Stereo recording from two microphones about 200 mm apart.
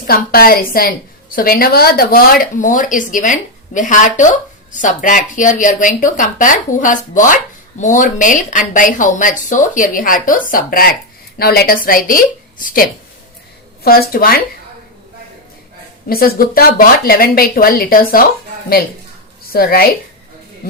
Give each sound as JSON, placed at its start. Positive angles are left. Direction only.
{"t": 0.1, "sound": "a woman's voice", "side_deg": 45}
{"t": 16.0, "sound": "a woman's voice", "side_deg": 50}
{"t": 19.5, "sound": "a woman's voice", "side_deg": 50}